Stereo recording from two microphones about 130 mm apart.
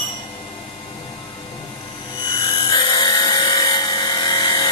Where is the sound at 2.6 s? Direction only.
35° left (ahead or behind).